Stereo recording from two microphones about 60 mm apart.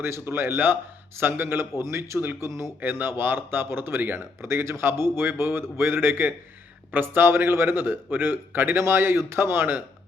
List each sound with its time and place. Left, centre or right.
0.0 s a man's voice: right
1.8 s a man's voice: right